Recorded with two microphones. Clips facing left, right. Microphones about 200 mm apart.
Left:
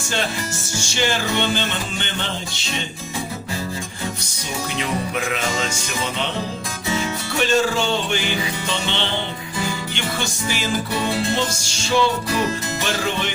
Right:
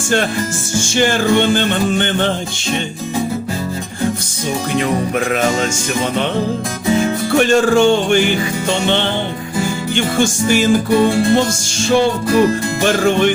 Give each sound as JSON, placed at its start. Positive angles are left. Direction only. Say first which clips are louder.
{"t": 0.8, "sound": "music", "louder": "right 8 dB", "side_deg": -50}
{"t": 5.3, "sound": "music", "louder": "right 9 dB", "side_deg": -50}
{"t": 7.0, "sound": "music", "louder": "right 9 dB", "side_deg": -50}